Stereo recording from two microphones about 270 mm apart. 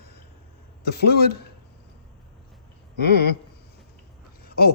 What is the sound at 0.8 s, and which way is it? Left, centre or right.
Speech, left.